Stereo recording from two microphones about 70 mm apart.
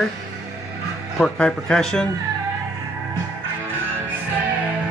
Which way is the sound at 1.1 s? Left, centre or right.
Centre.